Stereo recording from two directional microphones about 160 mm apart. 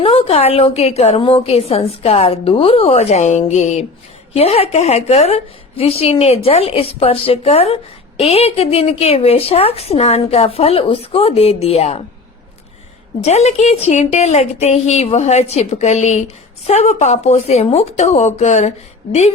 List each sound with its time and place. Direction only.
0.0 s a woman's voice: 40° left (ahead or behind)
13.2 s a woman's voice: 40° left (ahead or behind)